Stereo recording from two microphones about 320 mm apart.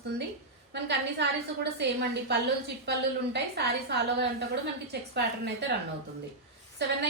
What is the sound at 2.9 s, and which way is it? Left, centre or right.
A woman's voice, right.